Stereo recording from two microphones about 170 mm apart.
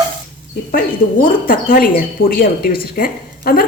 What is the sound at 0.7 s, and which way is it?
Speech, 55° left (ahead or behind).